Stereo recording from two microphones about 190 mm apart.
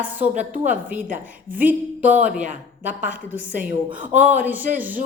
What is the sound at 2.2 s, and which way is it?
Speech, 40° right (ahead or behind).